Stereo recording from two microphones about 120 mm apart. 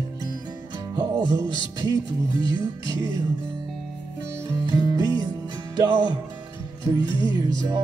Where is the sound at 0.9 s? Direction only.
35° right (ahead or behind).